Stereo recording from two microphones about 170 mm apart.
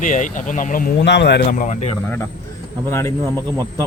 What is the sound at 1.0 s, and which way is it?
Speech, 90° left.